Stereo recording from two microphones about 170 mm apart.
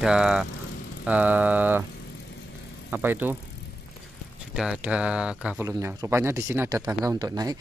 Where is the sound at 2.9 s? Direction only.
10° right (ahead or behind).